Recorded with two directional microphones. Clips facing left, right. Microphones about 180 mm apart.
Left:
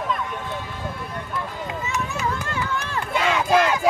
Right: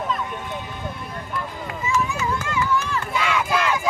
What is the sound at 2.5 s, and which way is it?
Crowd, 35° left (ahead or behind).